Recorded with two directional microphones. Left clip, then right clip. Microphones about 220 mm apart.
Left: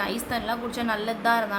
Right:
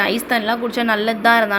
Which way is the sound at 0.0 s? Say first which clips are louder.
Right 10 dB; 20° right (ahead or behind).